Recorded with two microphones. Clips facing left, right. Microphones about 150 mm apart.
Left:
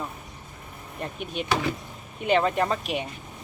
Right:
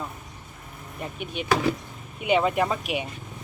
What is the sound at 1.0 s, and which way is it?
Speech, 5° right (ahead or behind).